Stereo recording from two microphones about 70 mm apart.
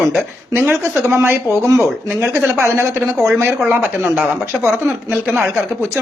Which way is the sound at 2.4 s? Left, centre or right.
Right.